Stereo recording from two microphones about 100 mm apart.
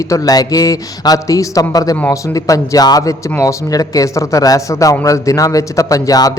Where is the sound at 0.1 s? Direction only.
40° left (ahead or behind).